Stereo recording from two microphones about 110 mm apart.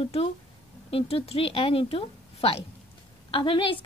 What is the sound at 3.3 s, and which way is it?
Speech, 50° left (ahead or behind).